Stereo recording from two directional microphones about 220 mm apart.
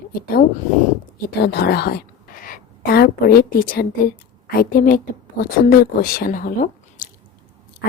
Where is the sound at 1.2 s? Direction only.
45° left (ahead or behind).